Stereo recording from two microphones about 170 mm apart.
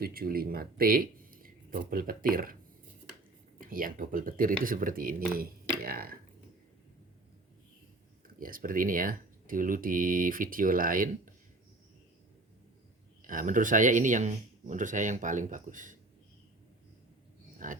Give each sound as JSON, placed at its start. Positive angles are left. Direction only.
{"t": 0.0, "sound": "speech", "side_deg": -60}
{"t": 3.6, "sound": "speech", "side_deg": -55}
{"t": 5.8, "sound": "a sound", "side_deg": -60}
{"t": 8.4, "sound": "speech", "side_deg": -55}
{"t": 13.2, "sound": "speech", "side_deg": -50}
{"t": 17.6, "sound": "speech", "side_deg": -50}